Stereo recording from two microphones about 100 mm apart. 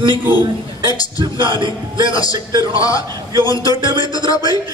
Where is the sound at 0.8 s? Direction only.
40° left (ahead or behind).